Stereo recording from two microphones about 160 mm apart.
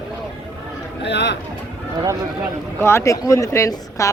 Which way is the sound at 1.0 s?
90° left.